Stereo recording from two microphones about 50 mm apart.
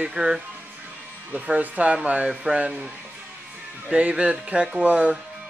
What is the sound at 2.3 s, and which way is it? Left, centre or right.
Speech, centre.